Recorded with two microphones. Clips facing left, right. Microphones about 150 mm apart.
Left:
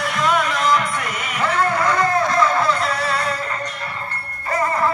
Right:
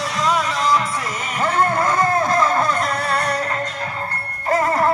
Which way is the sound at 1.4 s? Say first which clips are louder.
Right 1 dB; 45° right (ahead or behind).